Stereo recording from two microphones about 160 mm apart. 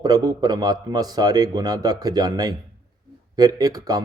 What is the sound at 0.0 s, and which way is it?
Speech, 25° right (ahead or behind).